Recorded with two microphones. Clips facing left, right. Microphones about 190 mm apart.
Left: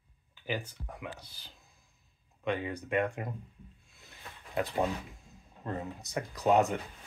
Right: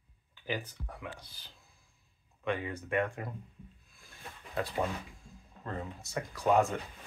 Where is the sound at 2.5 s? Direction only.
15° left (ahead or behind).